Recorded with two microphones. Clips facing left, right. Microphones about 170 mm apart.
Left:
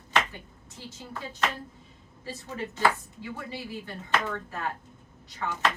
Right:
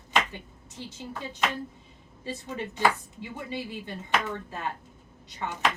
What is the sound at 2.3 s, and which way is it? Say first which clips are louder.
Speech: right 1 dB; 15° right (ahead or behind).